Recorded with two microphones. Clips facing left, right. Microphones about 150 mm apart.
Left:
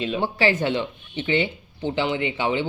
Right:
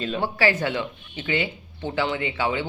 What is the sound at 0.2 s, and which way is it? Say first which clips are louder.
Speech: even; 25° left (ahead or behind).